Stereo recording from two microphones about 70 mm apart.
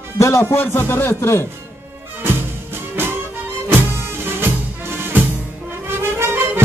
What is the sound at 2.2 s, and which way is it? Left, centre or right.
Music, right.